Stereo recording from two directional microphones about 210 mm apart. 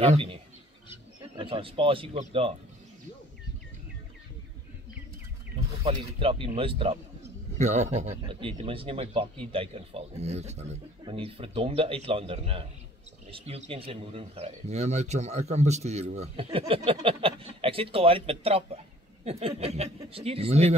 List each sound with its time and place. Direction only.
0.0 s a man's voice: 25° right (ahead or behind)
5.9 s a man's voice: 25° right (ahead or behind)